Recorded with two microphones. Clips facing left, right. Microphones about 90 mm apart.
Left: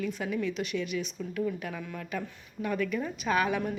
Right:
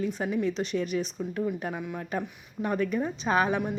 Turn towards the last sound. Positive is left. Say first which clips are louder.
# right 2 dB
turn(degrees=-30)  # may be behind; listen again after turning